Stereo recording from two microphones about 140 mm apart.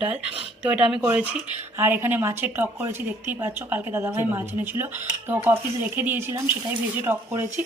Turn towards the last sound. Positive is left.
turn(degrees=-15)  # may be behind; listen again after turning